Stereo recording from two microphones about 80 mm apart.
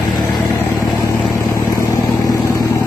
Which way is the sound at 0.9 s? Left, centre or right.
Left.